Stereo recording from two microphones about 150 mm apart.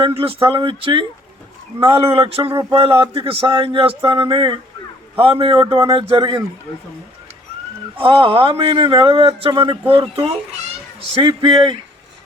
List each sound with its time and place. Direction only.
0.0 s speech: 40° right (ahead or behind)
2.0 s speech: 40° right (ahead or behind)
2.5 s a sound: 20° right (ahead or behind)
2.7 s speech: 35° right (ahead or behind)
7.9 s speech: 40° right (ahead or behind)